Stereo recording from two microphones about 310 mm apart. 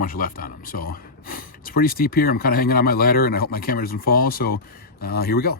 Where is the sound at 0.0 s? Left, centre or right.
Left.